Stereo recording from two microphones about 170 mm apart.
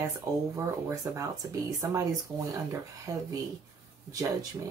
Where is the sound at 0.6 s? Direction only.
15° right (ahead or behind).